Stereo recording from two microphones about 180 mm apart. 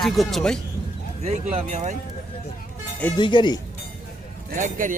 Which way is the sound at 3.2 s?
25° left (ahead or behind).